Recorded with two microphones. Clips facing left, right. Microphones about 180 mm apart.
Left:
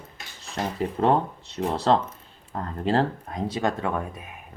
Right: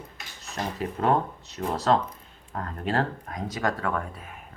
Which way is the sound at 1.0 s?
25° left (ahead or behind).